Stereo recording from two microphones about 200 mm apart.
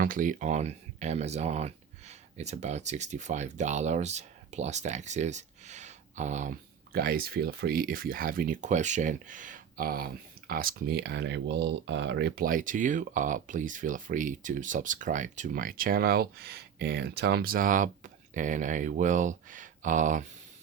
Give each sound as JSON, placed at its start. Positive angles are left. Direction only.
{"t": 0.0, "sound": "speech", "side_deg": -45}